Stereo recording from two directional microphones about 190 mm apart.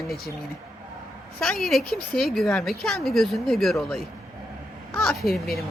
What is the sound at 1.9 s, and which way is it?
Speech, 55° left (ahead or behind).